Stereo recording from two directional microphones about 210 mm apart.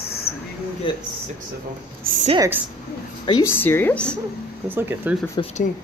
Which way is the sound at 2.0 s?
40° right (ahead or behind).